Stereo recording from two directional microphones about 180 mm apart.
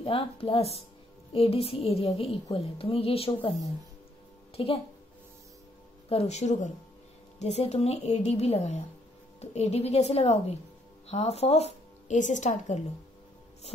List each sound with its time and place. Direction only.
0.0 s music: 30° left (ahead or behind)
4.6 s music: 30° left (ahead or behind)
6.0 s music: 35° left (ahead or behind)
11.1 s speech: 35° left (ahead or behind)